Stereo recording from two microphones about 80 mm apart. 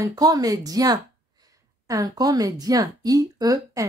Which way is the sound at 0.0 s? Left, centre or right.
Right.